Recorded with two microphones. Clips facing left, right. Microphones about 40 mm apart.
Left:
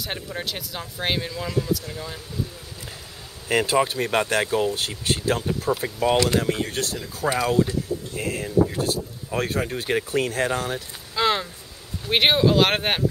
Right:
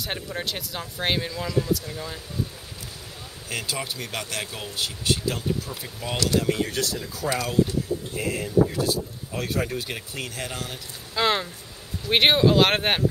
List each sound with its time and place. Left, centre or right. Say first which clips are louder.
0.0 s speech: even; centre
3.4 s speech: left 10 dB; left
5.7 s speech: left 12 dB; left
6.1 s speech: right 3 dB; left
8.2 s speech: even; left
11.1 s a sound: left 1 dB; centre
12.1 s speech: even; centre